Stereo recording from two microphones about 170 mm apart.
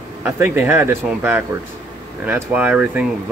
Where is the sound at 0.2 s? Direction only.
10° right (ahead or behind).